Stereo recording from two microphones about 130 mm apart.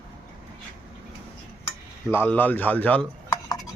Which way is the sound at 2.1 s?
15° left (ahead or behind).